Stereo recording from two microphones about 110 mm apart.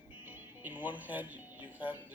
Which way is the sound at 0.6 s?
15° right (ahead or behind).